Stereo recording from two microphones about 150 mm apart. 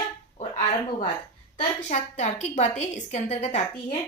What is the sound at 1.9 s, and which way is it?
A woman's voice, 50° left (ahead or behind).